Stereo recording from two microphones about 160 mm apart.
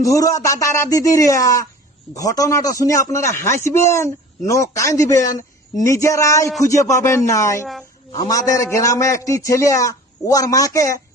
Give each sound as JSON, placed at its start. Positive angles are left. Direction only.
{"t": 0.0, "sound": "a man's voice", "side_deg": 20}